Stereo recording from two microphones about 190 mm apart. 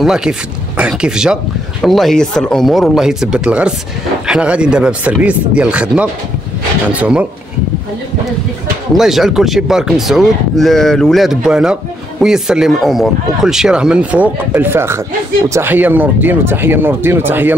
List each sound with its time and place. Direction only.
0.0 s speech: 5° right (ahead or behind)
8.9 s speech: centre (ahead or behind)